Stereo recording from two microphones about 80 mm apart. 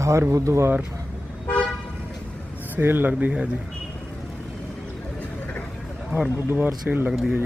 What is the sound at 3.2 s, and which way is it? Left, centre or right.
Speech, centre.